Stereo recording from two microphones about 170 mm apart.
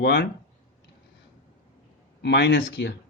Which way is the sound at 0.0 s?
75° left (ahead or behind).